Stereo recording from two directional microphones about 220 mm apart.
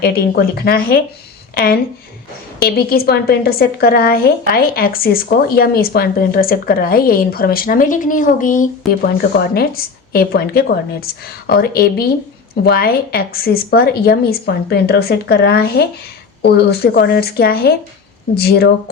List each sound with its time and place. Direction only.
0.0 s a woman's voice: 45° left (ahead or behind)
2.6 s a woman's voice: 45° left (ahead or behind)